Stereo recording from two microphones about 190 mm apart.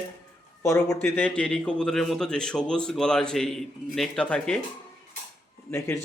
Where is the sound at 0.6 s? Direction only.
15° left (ahead or behind).